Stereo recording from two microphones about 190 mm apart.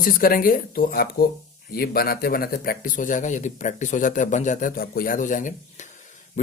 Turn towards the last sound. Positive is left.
turn(degrees=40)  # may be behind; listen again after turning